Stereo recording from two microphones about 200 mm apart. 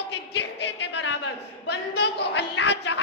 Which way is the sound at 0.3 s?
60° left (ahead or behind).